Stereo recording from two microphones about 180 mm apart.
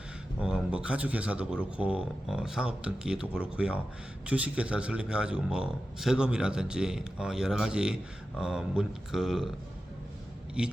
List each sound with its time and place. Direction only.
0.3 s neigh: 5° right (ahead or behind)
1.7 s speech: 5° right (ahead or behind)
10.6 s speech: 5° right (ahead or behind)